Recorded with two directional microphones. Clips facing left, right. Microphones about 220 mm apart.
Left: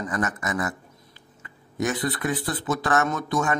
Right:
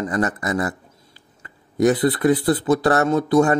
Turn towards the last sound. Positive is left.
turn(degrees=-35)  # may be behind; listen again after turning